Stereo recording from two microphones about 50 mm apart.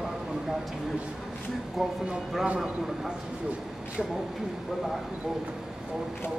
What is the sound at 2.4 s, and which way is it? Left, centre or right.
Speech, right.